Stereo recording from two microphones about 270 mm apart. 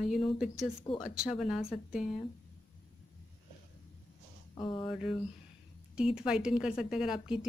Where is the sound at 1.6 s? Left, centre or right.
Left.